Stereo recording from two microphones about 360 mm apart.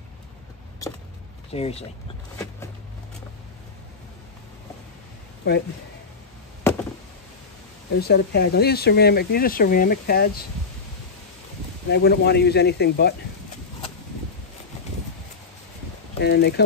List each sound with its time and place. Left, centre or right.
1.5 s speech: centre
2.3 s a sound: centre
6.7 s a sound: centre
8.0 s speech: left
11.9 s speech: left
16.2 s speech: left